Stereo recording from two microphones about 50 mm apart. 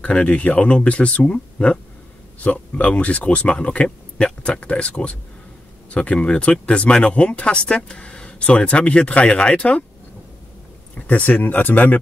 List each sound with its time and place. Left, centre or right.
0.0 s speech: left
11.0 s speech: left